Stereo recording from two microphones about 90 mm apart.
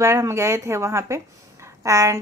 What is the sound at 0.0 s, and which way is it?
Speech, 30° right (ahead or behind).